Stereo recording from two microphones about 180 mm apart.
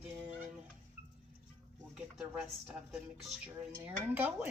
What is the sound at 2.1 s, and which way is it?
Speech, centre (ahead or behind).